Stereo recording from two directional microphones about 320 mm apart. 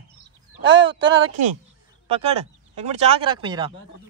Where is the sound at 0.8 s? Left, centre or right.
Centre.